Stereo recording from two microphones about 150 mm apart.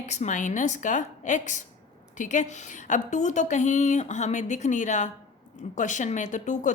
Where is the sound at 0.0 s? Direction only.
50° left (ahead or behind).